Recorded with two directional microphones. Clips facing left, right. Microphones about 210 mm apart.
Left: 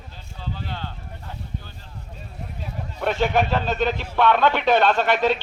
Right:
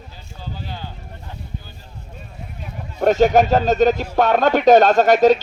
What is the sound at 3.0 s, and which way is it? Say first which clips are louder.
Speech: right 8 dB; 40° right (ahead or behind).